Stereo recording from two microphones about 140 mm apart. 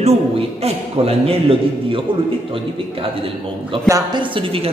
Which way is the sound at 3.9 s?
35° right (ahead or behind).